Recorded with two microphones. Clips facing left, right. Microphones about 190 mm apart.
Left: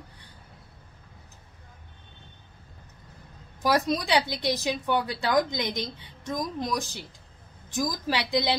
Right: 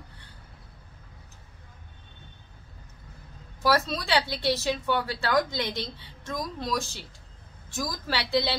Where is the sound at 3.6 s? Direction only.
15° left (ahead or behind).